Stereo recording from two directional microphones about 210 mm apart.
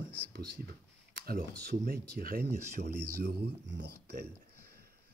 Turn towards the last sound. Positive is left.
turn(degrees=-55)  # may be behind; listen again after turning